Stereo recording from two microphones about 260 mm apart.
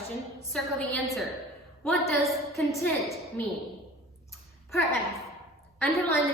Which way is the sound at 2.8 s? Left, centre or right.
Centre.